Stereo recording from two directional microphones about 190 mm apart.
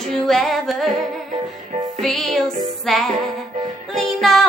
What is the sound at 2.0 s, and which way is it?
Music, centre (ahead or behind).